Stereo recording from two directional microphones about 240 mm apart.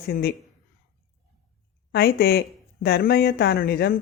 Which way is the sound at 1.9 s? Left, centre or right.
Left.